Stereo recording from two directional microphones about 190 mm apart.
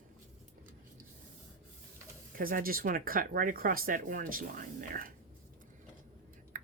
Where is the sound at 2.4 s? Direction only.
50° right (ahead or behind).